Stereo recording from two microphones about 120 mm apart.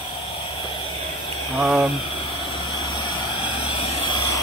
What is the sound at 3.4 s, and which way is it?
Vehicle, 55° left (ahead or behind).